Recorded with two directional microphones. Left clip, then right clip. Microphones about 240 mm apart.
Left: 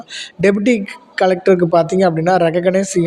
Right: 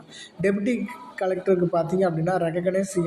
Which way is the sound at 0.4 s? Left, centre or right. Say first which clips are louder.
Left 10 dB; left.